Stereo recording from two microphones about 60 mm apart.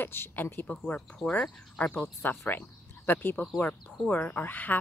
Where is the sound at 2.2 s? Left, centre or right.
Left.